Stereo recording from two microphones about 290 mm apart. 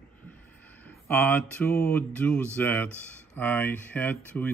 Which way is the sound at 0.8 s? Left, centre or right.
Centre.